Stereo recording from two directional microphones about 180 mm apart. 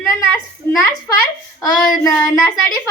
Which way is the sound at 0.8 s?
15° left (ahead or behind).